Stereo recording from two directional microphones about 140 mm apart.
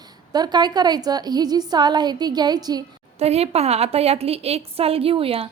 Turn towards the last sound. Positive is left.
turn(degrees=-40)  # may be behind; listen again after turning